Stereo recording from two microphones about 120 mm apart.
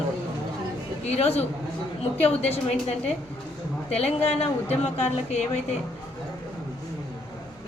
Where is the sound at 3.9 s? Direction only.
60° left (ahead or behind).